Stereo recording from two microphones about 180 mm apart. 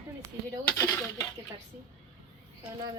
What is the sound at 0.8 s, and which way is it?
Dishes, 15° left (ahead or behind).